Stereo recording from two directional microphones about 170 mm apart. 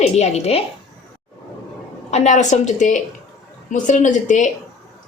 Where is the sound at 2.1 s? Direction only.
40° left (ahead or behind).